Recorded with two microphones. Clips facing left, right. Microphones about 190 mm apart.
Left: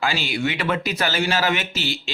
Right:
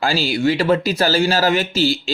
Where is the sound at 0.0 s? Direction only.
35° right (ahead or behind).